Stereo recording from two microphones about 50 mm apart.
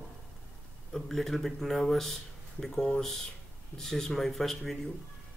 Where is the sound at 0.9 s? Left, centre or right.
Centre.